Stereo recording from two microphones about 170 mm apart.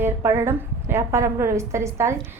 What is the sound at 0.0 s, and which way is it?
A woman's voice, 15° right (ahead or behind).